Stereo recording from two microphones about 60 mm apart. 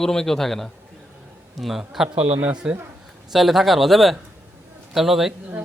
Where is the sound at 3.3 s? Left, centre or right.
Centre.